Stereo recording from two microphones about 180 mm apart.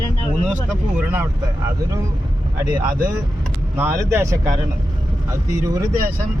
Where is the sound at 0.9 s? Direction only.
15° right (ahead or behind).